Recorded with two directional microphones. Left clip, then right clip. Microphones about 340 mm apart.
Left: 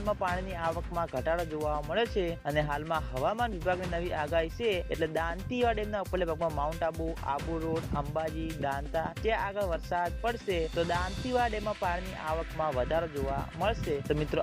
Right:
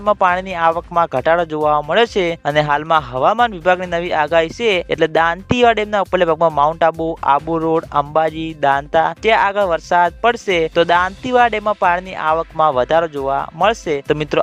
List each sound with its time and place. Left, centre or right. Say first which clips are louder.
0.0 s speech: right 17 dB; right